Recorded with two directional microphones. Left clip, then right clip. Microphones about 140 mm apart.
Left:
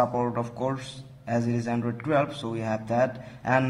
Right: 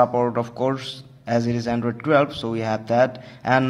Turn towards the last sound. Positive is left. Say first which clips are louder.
# right 5 dB
turn(degrees=-30)  # may be behind; listen again after turning